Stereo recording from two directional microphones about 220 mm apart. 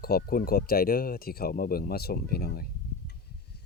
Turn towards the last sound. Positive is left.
turn(degrees=45)  # may be behind; listen again after turning